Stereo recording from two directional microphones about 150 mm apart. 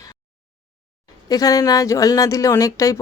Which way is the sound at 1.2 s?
25° left (ahead or behind).